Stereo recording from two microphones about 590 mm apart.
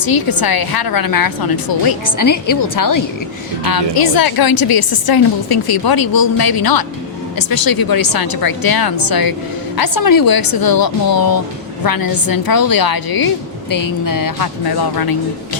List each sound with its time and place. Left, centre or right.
0.0 s a woman's voice: left